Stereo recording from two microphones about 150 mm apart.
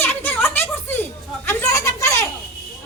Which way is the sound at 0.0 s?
15° left (ahead or behind).